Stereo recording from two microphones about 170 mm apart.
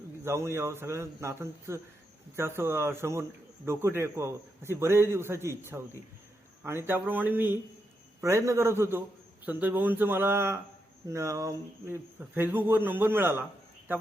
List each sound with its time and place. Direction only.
0.3 s a man's voice: 15° right (ahead or behind)